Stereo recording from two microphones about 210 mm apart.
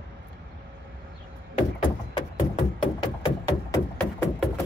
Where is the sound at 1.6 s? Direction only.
25° left (ahead or behind).